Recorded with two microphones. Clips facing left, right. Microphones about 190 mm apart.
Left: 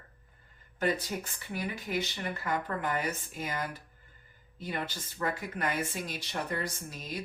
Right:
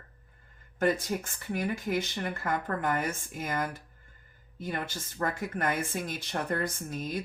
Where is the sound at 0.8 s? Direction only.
50° right (ahead or behind).